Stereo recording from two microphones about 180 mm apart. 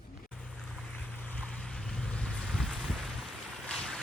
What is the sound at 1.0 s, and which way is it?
Boat, 10° left (ahead or behind).